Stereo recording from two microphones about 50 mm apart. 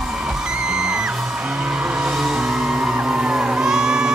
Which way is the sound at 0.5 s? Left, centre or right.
Centre.